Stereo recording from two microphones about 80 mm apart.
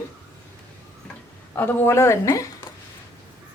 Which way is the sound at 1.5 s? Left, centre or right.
Left.